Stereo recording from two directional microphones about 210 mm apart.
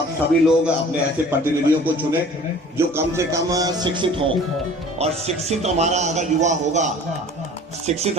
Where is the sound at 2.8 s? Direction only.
10° right (ahead or behind).